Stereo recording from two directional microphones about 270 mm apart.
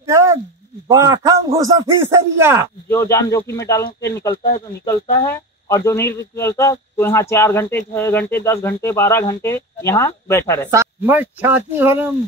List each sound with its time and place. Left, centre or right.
0.0 s a sound: centre
0.8 s a man's voice: centre
2.9 s speech: centre
10.7 s a man's voice: centre